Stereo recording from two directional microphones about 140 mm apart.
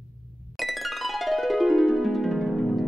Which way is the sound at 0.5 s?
Centre (ahead or behind).